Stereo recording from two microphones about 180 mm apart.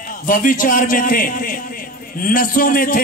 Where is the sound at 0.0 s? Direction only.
50° left (ahead or behind).